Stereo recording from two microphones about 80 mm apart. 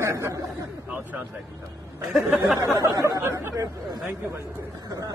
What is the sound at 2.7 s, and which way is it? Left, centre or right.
Speech, right.